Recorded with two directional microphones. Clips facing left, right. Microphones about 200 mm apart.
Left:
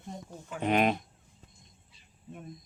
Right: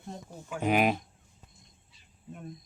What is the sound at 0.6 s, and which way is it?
Speech, 5° right (ahead or behind).